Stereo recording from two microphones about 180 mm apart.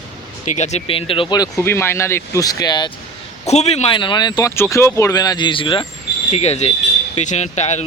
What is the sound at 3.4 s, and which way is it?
Speech, 40° left (ahead or behind).